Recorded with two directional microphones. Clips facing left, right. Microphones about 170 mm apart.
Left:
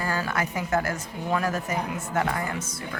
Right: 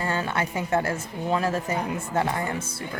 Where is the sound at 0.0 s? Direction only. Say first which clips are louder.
Right 1 dB; 25° right (ahead or behind).